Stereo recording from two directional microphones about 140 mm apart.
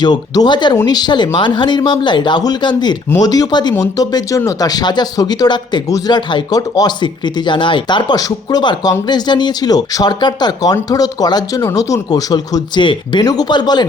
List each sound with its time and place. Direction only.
0.0 s speech: 30° left (ahead or behind)